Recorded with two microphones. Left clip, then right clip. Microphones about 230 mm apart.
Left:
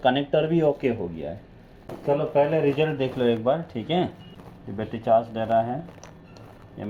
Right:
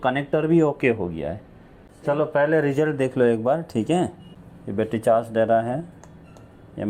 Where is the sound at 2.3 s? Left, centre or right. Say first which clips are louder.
Right 1 dB; right.